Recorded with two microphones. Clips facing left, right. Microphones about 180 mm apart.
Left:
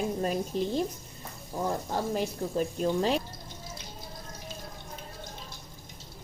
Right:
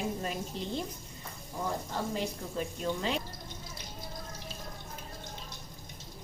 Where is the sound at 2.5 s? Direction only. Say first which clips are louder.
Left 7 dB; 40° left (ahead or behind).